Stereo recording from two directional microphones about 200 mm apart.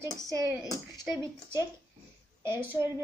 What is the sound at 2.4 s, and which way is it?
Speech, 10° right (ahead or behind).